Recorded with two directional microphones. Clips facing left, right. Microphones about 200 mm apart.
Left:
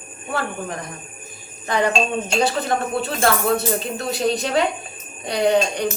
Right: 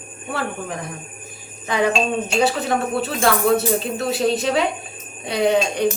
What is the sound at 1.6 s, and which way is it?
Speech, 5° right (ahead or behind).